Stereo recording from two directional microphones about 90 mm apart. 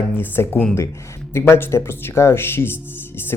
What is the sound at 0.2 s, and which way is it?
Speech, 25° left (ahead or behind).